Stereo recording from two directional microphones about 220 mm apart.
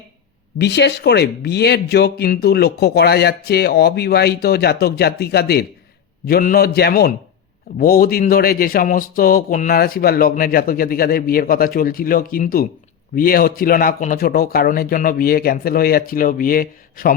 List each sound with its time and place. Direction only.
0.6 s speech: 50° left (ahead or behind)